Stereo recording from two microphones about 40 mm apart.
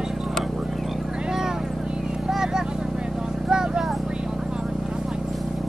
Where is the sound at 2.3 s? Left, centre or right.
Centre.